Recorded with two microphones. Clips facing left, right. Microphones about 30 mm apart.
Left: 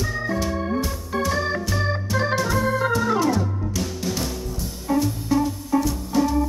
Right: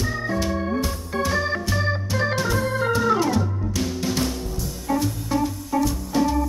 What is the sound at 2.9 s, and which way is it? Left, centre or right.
Music, centre.